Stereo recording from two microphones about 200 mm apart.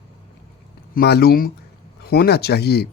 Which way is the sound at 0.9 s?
55° left (ahead or behind).